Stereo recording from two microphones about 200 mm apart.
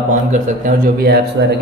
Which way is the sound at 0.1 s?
40° right (ahead or behind).